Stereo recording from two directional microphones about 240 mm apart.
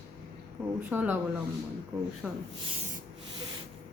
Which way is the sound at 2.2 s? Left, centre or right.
Centre.